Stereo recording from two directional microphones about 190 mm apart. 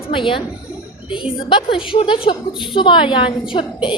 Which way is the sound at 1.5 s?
25° left (ahead or behind).